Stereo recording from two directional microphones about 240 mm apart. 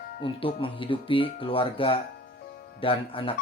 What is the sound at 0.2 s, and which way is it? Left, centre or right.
Speech, left.